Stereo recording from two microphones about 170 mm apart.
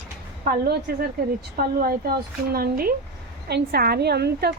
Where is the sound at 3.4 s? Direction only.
70° right (ahead or behind).